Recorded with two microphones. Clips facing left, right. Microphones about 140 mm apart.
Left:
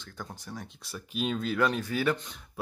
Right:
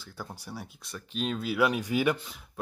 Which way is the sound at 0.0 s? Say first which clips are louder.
Right 1 dB; 5° right (ahead or behind).